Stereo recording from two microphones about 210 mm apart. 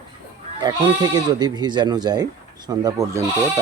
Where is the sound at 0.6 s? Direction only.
20° right (ahead or behind).